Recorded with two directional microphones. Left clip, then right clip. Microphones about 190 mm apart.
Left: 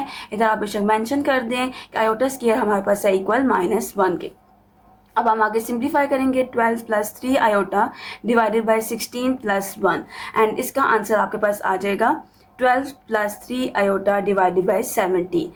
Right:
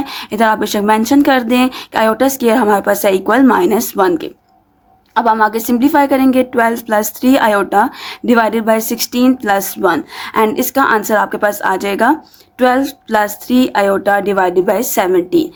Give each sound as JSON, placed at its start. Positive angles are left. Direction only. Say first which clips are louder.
{"t": 0.0, "sound": "a woman's voice", "louder": "right 7 dB", "side_deg": -55}